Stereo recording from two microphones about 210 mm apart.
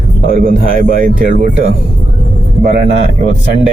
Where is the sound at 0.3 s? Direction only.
40° right (ahead or behind).